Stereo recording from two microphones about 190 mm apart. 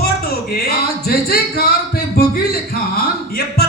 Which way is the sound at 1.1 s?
50° left (ahead or behind).